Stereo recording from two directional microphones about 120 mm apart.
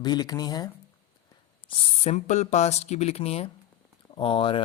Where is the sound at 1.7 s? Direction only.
55° left (ahead or behind).